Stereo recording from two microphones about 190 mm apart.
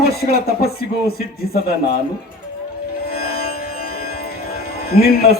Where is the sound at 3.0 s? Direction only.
55° left (ahead or behind).